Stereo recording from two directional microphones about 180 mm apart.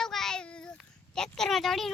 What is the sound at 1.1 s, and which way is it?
Speech, 5° left (ahead or behind).